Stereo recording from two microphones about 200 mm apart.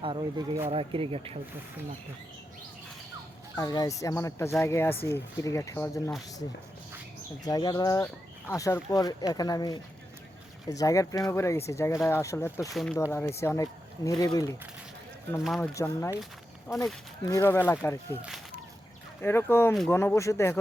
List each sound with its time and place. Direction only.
0.0 s speech: 25° right (ahead or behind)
3.5 s speech: 20° left (ahead or behind)
7.4 s speech: 20° left (ahead or behind)
15.4 s speech: centre (ahead or behind)
15.7 s speech: 15° left (ahead or behind)
16.6 s speech: centre (ahead or behind)
17.2 s speech: 15° left (ahead or behind)
19.2 s speech: 10° left (ahead or behind)